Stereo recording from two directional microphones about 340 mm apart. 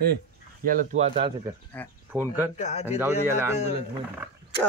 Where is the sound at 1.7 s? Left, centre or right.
Centre.